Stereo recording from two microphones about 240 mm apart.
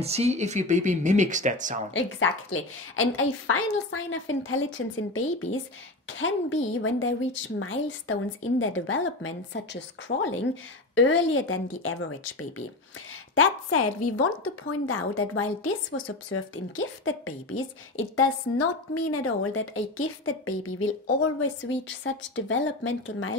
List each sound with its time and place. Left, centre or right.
0.0 s speech: right
2.0 s a woman's voice: left
18.1 s a woman's voice: left